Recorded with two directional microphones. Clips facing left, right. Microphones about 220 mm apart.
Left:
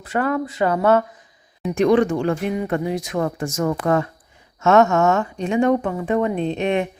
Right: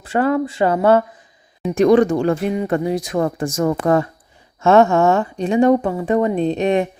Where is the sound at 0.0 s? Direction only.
30° right (ahead or behind).